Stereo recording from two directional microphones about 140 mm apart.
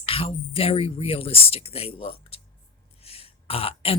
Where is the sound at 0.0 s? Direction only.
40° left (ahead or behind).